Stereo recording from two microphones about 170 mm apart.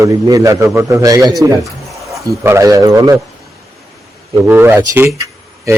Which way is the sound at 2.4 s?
15° right (ahead or behind).